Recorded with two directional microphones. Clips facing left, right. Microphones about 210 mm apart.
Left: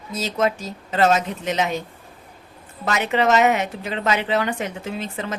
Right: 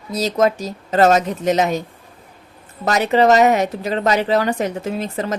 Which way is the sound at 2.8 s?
40° right (ahead or behind).